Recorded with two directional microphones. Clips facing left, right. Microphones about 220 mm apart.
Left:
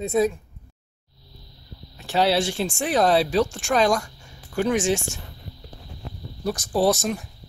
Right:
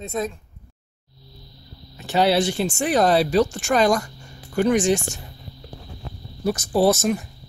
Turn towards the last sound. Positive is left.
turn(degrees=-5)  # may be behind; listen again after turning